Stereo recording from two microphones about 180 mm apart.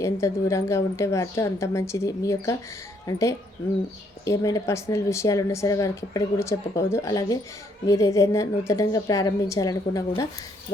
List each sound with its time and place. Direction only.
0.0 s speech: 15° left (ahead or behind)